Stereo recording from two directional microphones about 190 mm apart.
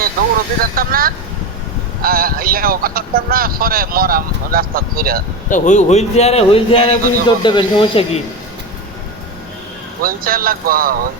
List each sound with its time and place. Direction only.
0.6 s speech: 50° right (ahead or behind)
5.5 s a man's voice: 40° left (ahead or behind)
10.0 s speech: 50° right (ahead or behind)